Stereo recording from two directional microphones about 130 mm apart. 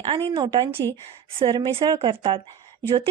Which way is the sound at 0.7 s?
20° left (ahead or behind).